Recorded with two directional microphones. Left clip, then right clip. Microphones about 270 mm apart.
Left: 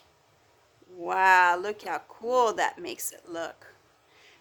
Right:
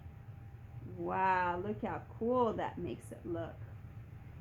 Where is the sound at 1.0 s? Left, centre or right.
Left.